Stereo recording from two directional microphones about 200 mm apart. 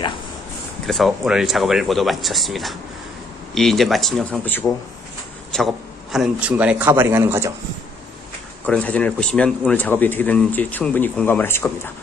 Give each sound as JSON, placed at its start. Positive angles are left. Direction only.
{"t": 0.9, "sound": "a man's voice", "side_deg": 0}
{"t": 8.6, "sound": "speech", "side_deg": 5}